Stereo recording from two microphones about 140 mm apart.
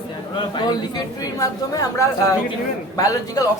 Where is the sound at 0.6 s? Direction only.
30° left (ahead or behind).